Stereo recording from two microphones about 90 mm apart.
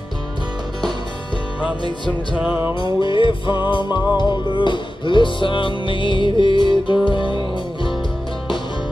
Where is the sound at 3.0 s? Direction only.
65° left (ahead or behind).